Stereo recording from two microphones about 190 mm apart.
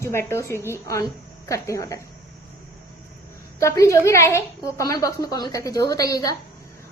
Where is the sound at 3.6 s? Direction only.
15° left (ahead or behind).